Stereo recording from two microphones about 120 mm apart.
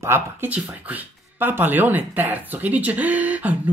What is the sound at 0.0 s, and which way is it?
Speech, 20° right (ahead or behind).